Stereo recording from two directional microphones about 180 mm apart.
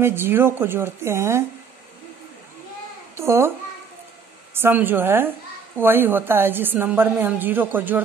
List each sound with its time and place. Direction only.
0.0 s a woman's voice: 15° right (ahead or behind)
3.2 s a woman's voice: 15° right (ahead or behind)
4.6 s a woman's voice: 10° right (ahead or behind)